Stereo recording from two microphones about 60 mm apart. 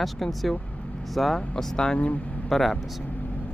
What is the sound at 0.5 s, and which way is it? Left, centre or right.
Vehicle, left.